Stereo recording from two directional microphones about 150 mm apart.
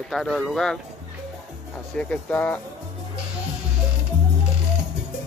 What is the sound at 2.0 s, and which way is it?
Speech, 10° left (ahead or behind).